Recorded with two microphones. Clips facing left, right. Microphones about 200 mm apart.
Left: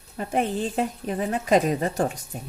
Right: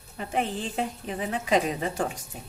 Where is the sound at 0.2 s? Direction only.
45° left (ahead or behind).